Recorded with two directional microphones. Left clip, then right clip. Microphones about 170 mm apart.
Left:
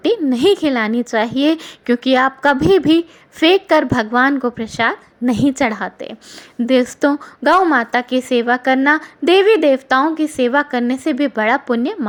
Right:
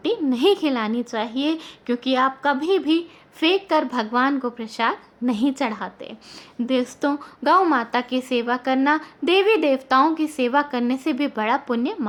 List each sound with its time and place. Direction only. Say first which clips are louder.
0.0 s a woman's voice: left 5 dB; 25° left (ahead or behind)